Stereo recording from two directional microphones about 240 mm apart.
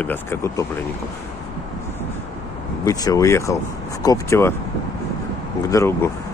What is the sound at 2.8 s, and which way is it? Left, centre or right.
Speech, centre.